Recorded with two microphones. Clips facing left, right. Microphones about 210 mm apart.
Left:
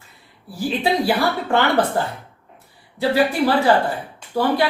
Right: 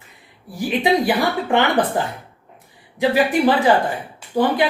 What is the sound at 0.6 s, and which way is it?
Speech, 15° right (ahead or behind).